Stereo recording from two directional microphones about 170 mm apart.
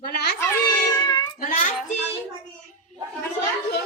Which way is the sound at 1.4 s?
50° left (ahead or behind).